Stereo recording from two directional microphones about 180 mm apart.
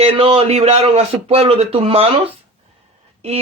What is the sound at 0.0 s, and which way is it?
A man's voice, 30° right (ahead or behind).